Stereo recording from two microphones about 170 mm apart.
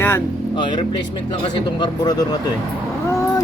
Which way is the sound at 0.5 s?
25° left (ahead or behind).